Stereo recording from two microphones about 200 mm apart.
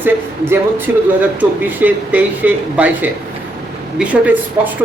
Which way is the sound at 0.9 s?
10° right (ahead or behind).